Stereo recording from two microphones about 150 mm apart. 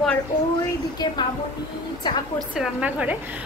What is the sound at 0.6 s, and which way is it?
Speech, 30° left (ahead or behind).